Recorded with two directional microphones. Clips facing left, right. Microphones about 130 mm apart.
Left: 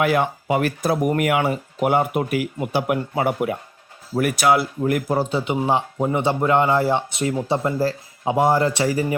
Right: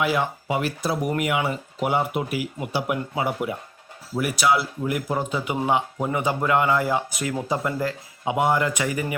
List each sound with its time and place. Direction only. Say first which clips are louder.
0.0 s speech: left 4 dB; 55° left (ahead or behind); by 9.1 s 35° left (ahead or behind)